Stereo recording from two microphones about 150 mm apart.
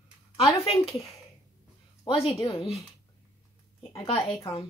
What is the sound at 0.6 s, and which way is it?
Speech, 40° left (ahead or behind).